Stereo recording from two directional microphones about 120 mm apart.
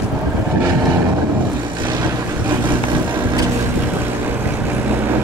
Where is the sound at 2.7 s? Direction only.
40° right (ahead or behind).